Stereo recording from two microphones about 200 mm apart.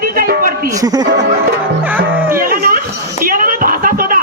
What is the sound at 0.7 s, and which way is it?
Speech, 20° right (ahead or behind).